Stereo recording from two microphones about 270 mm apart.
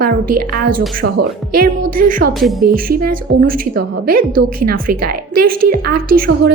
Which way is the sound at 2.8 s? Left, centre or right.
Right.